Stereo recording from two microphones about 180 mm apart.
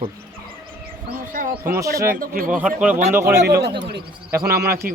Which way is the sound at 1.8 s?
55° right (ahead or behind).